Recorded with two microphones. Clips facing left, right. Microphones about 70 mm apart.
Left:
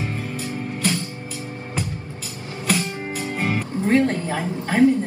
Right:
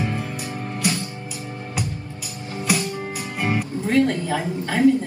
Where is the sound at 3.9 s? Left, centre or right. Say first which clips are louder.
Even; left.